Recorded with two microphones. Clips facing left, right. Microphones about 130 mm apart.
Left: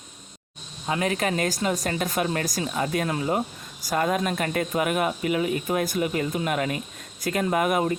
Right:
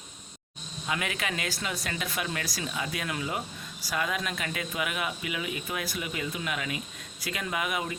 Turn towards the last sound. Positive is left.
turn(degrees=45)  # may be behind; listen again after turning